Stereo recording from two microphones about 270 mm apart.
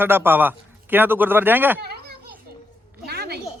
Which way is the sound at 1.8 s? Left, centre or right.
Right.